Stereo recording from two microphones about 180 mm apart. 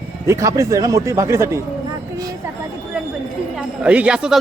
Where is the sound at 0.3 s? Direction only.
15° right (ahead or behind).